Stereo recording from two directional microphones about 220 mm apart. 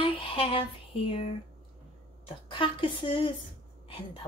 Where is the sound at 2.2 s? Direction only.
20° left (ahead or behind).